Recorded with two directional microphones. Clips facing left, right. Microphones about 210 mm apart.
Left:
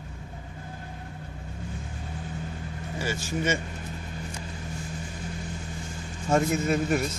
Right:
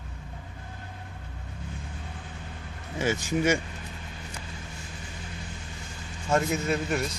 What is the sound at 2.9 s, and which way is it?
Speech, 20° right (ahead or behind).